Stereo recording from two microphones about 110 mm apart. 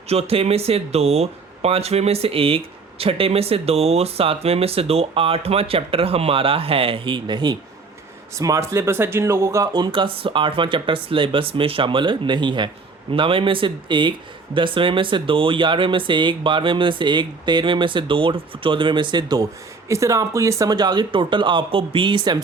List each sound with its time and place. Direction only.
0.1 s speech: 65° right (ahead or behind); by 7.6 s 45° right (ahead or behind)
8.4 s speech: 30° right (ahead or behind)
9.7 s speech: 45° right (ahead or behind)
19.9 s speech: 30° right (ahead or behind); by 22.4 s 45° right (ahead or behind)